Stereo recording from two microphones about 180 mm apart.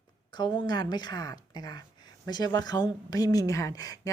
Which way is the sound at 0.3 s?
25° left (ahead or behind).